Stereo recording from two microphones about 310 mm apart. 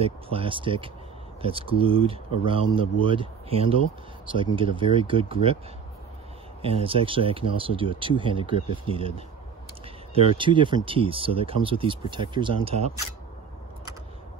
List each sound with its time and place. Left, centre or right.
0.0 s speech: centre
6.6 s speech: centre
10.1 s speech: centre